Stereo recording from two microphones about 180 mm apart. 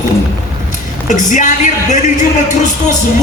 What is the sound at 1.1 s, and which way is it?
Music, 45° left (ahead or behind).